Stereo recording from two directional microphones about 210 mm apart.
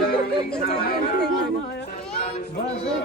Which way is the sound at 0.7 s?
50° left (ahead or behind).